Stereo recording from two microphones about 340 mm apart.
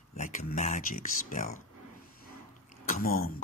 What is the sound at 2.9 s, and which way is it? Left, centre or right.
Speech, left.